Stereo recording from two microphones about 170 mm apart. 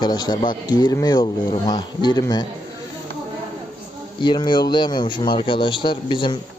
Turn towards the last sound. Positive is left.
turn(degrees=30)  # may be behind; listen again after turning